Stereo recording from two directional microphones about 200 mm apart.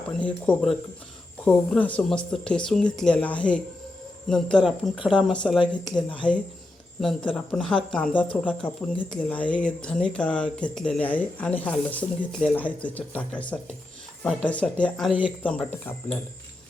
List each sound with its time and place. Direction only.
0.2 s speech: 5° left (ahead or behind)
7.3 s speech: 5° left (ahead or behind)